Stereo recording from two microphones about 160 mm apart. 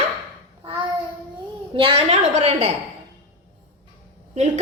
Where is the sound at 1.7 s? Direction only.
35° right (ahead or behind).